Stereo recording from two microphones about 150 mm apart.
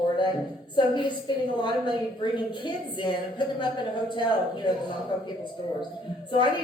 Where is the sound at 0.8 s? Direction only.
30° left (ahead or behind).